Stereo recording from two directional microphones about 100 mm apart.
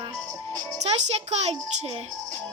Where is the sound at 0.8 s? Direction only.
90° right.